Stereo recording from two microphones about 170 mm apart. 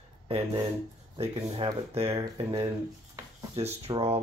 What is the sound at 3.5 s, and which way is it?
Speech, 35° right (ahead or behind).